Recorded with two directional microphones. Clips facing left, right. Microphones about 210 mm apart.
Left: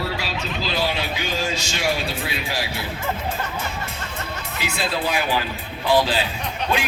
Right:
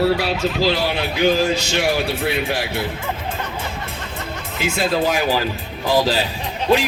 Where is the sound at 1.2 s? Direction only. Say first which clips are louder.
Right 9 dB; 60° right (ahead or behind).